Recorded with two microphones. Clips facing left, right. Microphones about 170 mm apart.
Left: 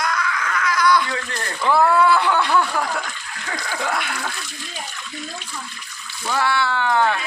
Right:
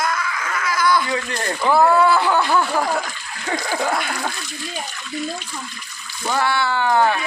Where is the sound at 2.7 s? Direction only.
20° right (ahead or behind).